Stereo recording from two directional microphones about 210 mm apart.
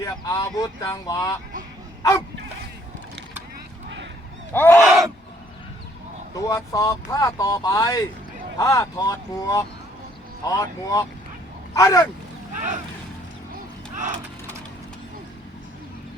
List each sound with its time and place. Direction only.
0.0 s speech: 15° left (ahead or behind)
4.5 s speech: 10° left (ahead or behind)
4.8 s a sound: centre (ahead or behind)
6.3 s speech: 15° left (ahead or behind)